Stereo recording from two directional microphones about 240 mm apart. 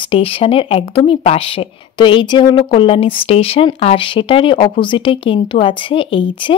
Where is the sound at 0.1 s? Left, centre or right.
Left.